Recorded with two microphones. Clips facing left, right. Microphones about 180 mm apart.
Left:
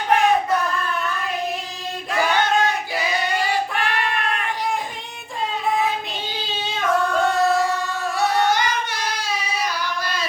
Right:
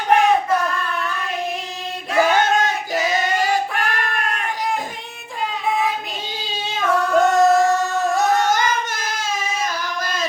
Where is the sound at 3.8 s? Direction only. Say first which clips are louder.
Even; 45° right (ahead or behind).